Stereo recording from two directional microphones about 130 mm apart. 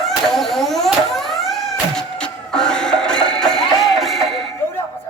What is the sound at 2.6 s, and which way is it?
Music, 5° left (ahead or behind).